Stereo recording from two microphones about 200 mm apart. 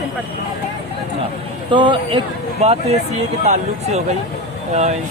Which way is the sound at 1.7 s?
25° right (ahead or behind).